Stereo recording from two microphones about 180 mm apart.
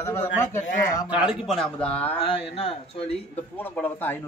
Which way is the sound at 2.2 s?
30° left (ahead or behind).